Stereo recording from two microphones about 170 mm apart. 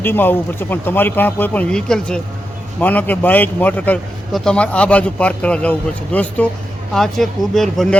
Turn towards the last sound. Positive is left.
turn(degrees=0)  # may be behind; listen again after turning